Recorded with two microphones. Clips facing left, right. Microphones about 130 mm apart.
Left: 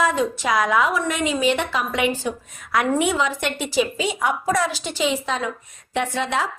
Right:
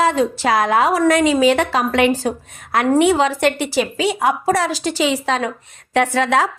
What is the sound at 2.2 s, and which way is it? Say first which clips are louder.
A woman's voice: right 5 dB; 60° right (ahead or behind).